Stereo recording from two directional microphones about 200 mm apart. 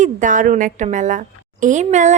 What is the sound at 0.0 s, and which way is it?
A woman's voice, 40° right (ahead or behind).